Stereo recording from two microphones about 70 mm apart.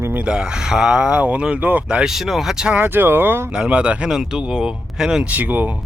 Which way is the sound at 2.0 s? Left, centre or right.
Centre.